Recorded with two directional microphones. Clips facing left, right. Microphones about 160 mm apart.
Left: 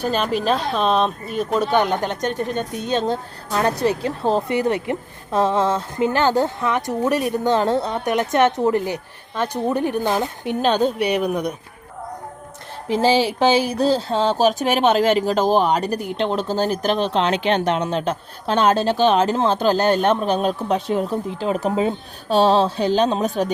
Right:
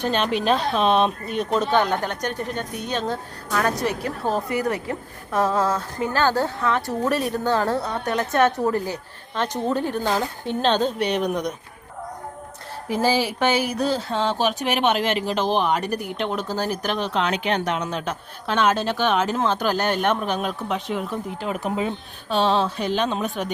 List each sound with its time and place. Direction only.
0.0 s a woman's voice: 5° left (ahead or behind)
12.9 s a woman's voice: 25° left (ahead or behind)